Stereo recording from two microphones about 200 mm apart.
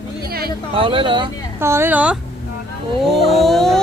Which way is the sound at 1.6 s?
10° right (ahead or behind).